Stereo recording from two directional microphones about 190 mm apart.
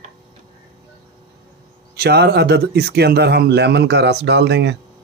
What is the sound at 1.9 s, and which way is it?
Speech, 55° right (ahead or behind).